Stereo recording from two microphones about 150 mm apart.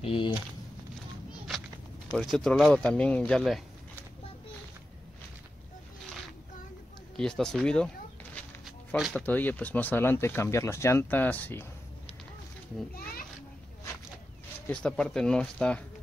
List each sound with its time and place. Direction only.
0.0 s speech: 35° left (ahead or behind)
2.1 s speech: centre (ahead or behind)
7.2 s speech: 5° left (ahead or behind)
8.6 s a sound: centre (ahead or behind)
9.2 s speech: 10° left (ahead or behind)
12.9 s children playing: 80° left
14.7 s speech: 5° left (ahead or behind)